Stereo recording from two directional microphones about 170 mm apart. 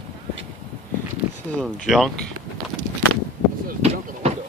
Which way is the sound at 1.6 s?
Centre (ahead or behind).